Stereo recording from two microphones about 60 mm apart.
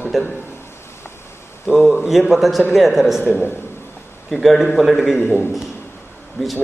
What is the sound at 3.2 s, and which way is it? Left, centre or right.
Speech, right.